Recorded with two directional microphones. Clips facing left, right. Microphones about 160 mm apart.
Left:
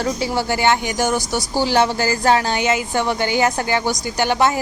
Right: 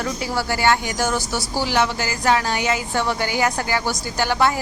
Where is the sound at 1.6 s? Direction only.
30° left (ahead or behind).